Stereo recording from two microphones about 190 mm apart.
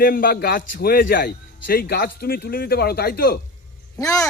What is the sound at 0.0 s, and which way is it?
A man's voice, 50° left (ahead or behind).